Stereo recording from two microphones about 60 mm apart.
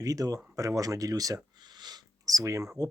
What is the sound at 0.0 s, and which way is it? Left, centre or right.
Speech, right.